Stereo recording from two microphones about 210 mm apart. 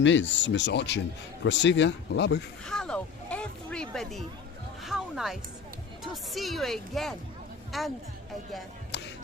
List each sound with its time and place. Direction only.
0.0 s speech: 60° left (ahead or behind)
2.6 s speech: 5° left (ahead or behind)
4.8 s music: centre (ahead or behind)
6.0 s speech: centre (ahead or behind)
8.9 s music: 55° left (ahead or behind)